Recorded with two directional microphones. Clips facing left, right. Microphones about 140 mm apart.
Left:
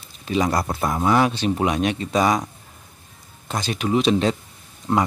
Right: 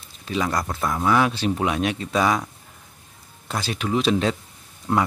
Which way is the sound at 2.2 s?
15° left (ahead or behind).